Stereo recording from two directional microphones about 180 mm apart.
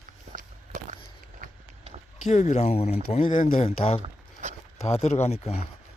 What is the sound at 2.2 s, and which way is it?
Speech, 45° left (ahead or behind).